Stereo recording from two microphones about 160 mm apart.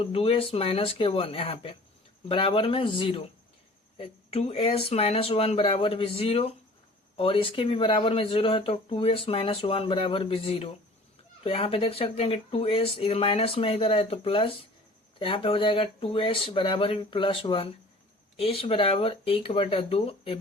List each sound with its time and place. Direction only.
0.0 s speech: 35° left (ahead or behind)